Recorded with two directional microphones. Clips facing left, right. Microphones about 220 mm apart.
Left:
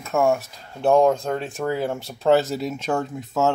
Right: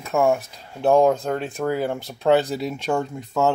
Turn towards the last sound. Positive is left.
turn(degrees=0)  # may be behind; listen again after turning